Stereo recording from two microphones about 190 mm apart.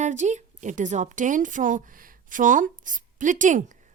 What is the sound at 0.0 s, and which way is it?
A woman's voice, 40° right (ahead or behind).